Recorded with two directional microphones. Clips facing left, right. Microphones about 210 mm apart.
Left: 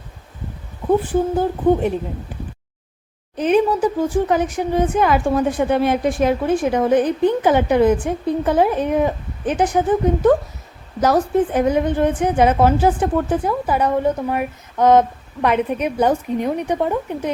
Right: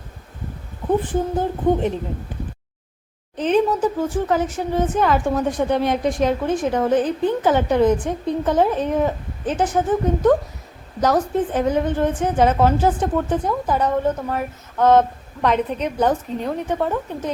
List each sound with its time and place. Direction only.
1.0 s a woman's voice: 10° left (ahead or behind)
3.3 s a woman's voice: 10° left (ahead or behind)